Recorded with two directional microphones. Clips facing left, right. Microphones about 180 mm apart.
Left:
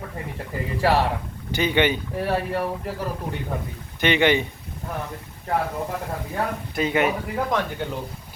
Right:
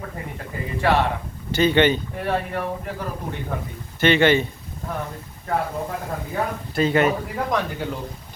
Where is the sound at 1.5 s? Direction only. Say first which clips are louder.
Right 4 dB; 10° left (ahead or behind).